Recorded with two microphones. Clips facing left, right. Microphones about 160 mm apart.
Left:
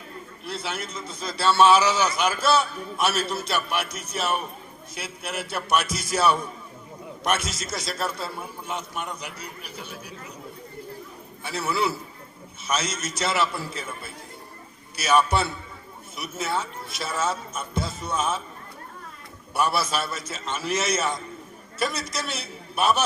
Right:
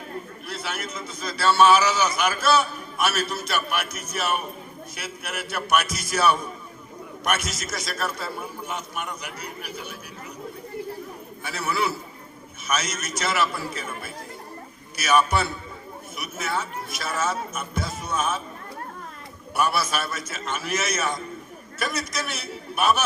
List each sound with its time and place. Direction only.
0.4 s a man's voice: 30° left (ahead or behind)
11.4 s a man's voice: 30° left (ahead or behind)
14.9 s a man's voice: 25° left (ahead or behind)
19.5 s a man's voice: 30° left (ahead or behind)